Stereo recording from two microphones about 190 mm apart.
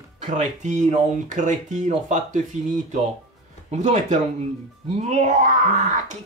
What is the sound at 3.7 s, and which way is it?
Speech, 40° right (ahead or behind).